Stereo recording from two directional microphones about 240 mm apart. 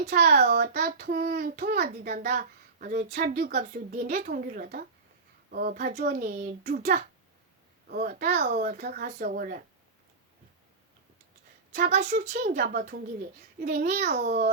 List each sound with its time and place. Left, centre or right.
0.1 s a woman's voice: right
11.9 s a woman's voice: right